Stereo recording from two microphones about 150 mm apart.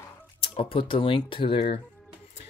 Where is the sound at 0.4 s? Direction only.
35° left (ahead or behind).